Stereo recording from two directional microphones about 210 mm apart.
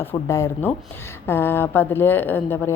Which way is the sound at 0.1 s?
15° left (ahead or behind).